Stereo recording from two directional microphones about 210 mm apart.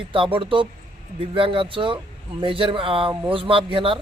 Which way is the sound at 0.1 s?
25° right (ahead or behind).